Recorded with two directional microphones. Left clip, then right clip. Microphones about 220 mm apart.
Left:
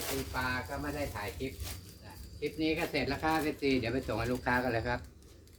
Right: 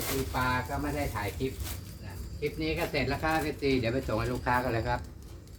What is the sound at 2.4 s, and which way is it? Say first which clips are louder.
Speech: right 1 dB; 15° left (ahead or behind).